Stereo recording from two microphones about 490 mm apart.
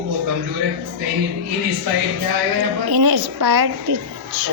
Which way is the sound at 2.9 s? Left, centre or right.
Right.